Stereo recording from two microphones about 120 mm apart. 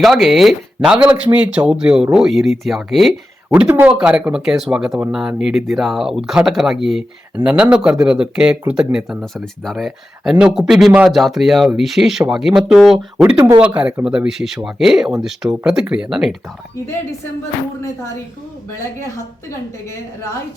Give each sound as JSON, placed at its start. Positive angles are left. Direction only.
{"t": 0.0, "sound": "speech", "side_deg": 0}
{"t": 3.5, "sound": "speech", "side_deg": -15}
{"t": 19.1, "sound": "a woman's voice", "side_deg": 25}